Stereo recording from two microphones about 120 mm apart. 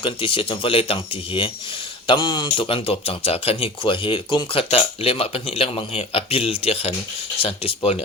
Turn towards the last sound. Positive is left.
turn(degrees=55)  # may be behind; listen again after turning